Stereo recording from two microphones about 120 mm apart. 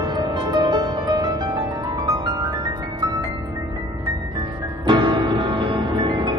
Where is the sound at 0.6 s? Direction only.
40° right (ahead or behind).